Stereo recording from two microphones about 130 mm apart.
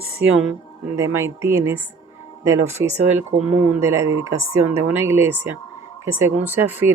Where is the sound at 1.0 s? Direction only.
20° right (ahead or behind).